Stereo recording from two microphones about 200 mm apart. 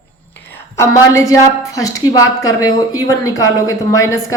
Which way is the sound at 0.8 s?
15° left (ahead or behind).